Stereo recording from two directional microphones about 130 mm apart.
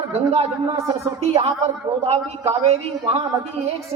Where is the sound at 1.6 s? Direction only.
50° right (ahead or behind).